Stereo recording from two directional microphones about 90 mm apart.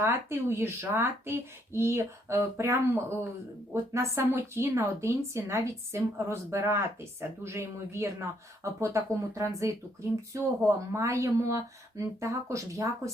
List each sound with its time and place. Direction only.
0.0 s a woman's voice: 30° right (ahead or behind)